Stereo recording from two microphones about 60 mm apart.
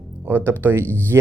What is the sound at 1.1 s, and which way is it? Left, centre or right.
Speech, right.